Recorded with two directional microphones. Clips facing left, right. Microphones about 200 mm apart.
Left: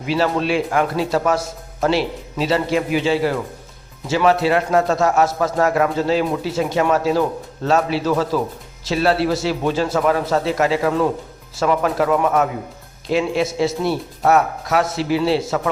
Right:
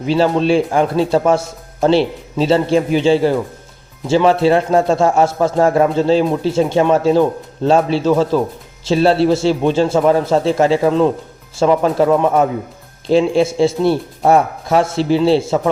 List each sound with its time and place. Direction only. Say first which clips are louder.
0.0 s a man's voice: right 5 dB; 25° right (ahead or behind)